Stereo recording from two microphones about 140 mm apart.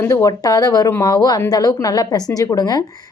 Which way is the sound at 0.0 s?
20° left (ahead or behind).